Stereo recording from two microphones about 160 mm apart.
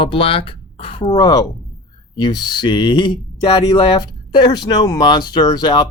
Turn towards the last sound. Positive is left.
turn(degrees=25)  # may be behind; listen again after turning